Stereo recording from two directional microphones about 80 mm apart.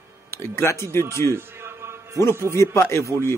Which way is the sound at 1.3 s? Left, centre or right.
Right.